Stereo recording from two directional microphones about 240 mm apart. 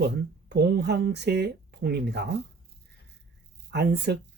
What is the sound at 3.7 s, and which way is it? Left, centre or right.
Speech, right.